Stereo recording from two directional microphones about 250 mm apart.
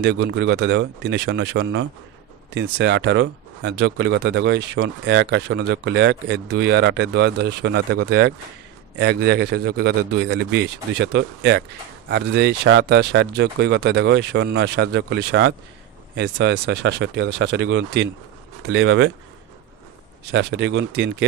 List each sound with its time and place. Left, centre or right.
0.0 s speech: right
20.2 s speech: right